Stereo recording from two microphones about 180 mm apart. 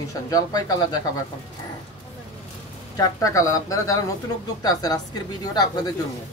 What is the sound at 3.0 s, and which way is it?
Speech, 20° left (ahead or behind).